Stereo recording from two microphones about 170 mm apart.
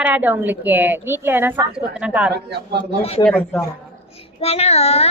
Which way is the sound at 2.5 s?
80° right.